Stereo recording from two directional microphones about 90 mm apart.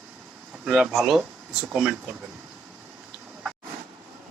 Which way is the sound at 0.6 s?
10° right (ahead or behind).